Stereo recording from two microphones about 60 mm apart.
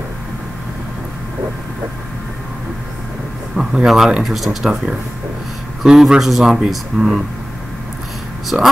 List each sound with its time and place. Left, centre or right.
3.5 s speech: centre
8.5 s speech: centre